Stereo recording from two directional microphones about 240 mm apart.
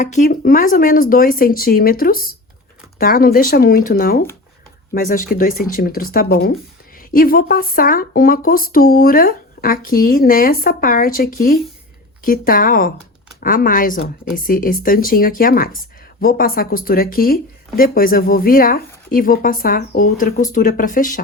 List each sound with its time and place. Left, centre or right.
0.0 s speech: left